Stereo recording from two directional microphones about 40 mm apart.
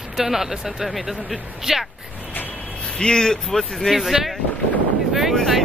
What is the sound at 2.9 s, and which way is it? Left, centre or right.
Speech, centre.